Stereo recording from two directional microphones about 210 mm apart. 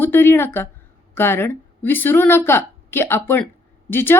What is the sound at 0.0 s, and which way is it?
A woman's voice, 10° left (ahead or behind).